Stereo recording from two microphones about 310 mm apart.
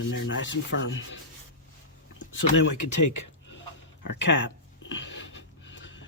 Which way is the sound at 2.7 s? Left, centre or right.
Left.